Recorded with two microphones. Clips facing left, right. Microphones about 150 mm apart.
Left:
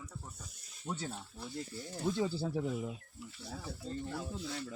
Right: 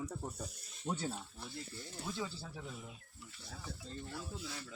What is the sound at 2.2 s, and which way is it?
Speech, 40° left (ahead or behind).